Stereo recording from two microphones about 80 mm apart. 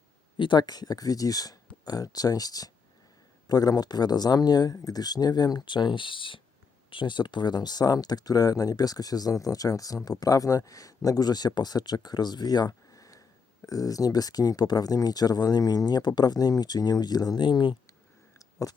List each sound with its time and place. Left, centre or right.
0.3 s speech: left
6.9 s speech: left
18.3 s a sound: left